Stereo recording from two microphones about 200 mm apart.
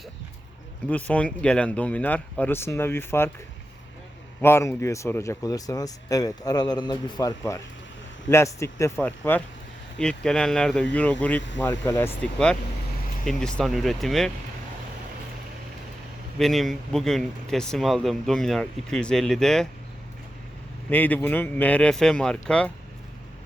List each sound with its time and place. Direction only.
0.9 s speech: 5° left (ahead or behind)
4.4 s speech: 10° left (ahead or behind)
16.4 s speech: centre (ahead or behind)
20.9 s speech: 10° left (ahead or behind)